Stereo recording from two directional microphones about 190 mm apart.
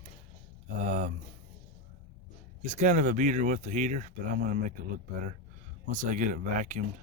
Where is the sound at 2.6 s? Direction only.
40° right (ahead or behind).